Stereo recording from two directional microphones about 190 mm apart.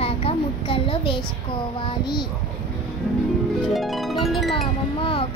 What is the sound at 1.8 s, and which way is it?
Speech, 25° left (ahead or behind).